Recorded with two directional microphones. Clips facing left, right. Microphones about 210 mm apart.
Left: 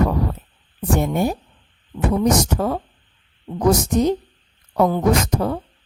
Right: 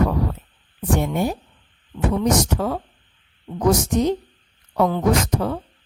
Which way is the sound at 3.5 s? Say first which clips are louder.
Left 1 dB; 45° left (ahead or behind).